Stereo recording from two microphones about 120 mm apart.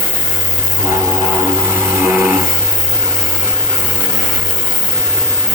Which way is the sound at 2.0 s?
20° right (ahead or behind).